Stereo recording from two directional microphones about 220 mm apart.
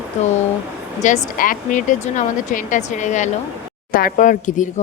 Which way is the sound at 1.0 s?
35° left (ahead or behind).